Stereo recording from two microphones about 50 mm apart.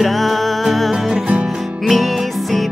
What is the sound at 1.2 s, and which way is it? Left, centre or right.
Music, right.